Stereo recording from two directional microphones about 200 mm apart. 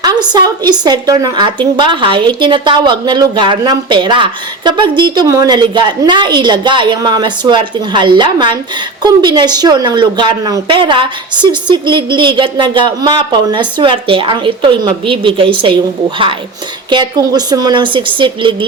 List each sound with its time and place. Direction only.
0.0 s a woman's voice: 20° right (ahead or behind)